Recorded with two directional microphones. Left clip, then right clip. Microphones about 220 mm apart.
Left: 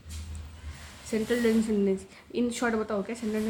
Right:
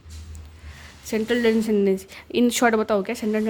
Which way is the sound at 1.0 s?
45° right (ahead or behind).